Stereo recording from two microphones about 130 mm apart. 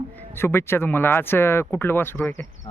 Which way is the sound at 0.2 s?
20° left (ahead or behind).